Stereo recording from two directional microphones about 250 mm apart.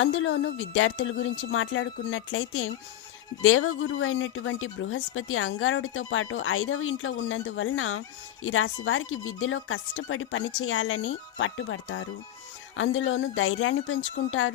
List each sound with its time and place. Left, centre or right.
0.0 s speech: left